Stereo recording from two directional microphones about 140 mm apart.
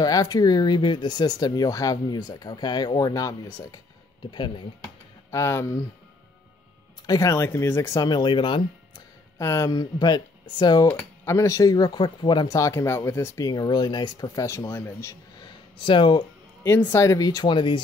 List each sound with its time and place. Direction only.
0.0 s speech: 25° left (ahead or behind)
5.3 s speech: 20° left (ahead or behind)
7.1 s speech: 20° left (ahead or behind)
9.4 s speech: 20° left (ahead or behind)
15.4 s a sound: 35° left (ahead or behind)
16.6 s speech: 15° left (ahead or behind); by 17.8 s 35° left (ahead or behind)